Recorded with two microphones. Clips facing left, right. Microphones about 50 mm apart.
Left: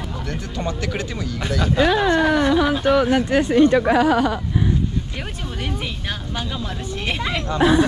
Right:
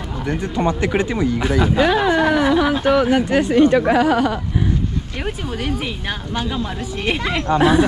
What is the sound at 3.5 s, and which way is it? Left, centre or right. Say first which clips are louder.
Speech: right 1 dB; right.